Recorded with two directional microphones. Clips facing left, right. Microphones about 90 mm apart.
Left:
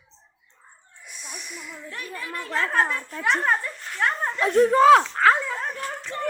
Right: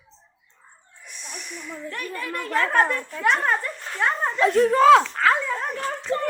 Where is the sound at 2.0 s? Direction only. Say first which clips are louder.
Right 2 dB; 15° left (ahead or behind).